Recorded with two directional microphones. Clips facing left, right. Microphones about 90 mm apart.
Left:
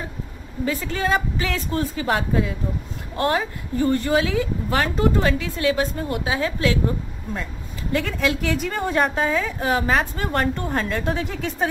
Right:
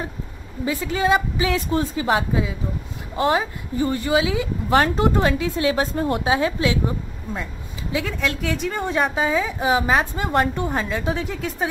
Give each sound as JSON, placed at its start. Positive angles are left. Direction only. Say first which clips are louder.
{"t": 0.7, "sound": "a woman's voice", "louder": "right 3 dB", "side_deg": -10}
{"t": 2.0, "sound": "a woman's voice", "louder": "right 1 dB", "side_deg": -5}
{"t": 4.6, "sound": "speech", "louder": "right 5 dB", "side_deg": -30}
{"t": 7.9, "sound": "a woman's voice", "louder": "left 2 dB", "side_deg": 0}